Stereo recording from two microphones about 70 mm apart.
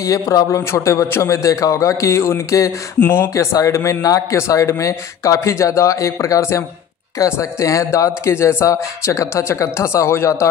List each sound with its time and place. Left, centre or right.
0.0 s a man's voice: left
0.7 s speech: left
3.0 s speech: left
3.3 s speech: left
4.0 s a man's voice: left
4.4 s speech: left